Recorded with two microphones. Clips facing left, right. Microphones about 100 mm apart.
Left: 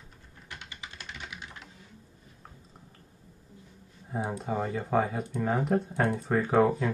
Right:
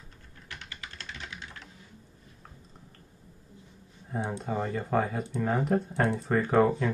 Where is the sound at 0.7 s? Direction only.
15° left (ahead or behind).